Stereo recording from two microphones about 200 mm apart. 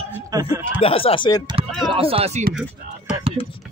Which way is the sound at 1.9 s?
30° right (ahead or behind).